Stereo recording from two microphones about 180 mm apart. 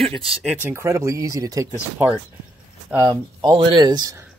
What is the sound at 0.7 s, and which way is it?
Speech, 15° right (ahead or behind).